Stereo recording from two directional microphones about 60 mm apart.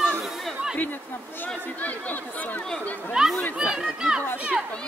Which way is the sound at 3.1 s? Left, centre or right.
Centre.